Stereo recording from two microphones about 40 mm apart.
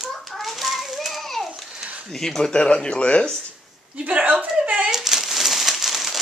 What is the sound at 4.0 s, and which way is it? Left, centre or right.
Speech, right.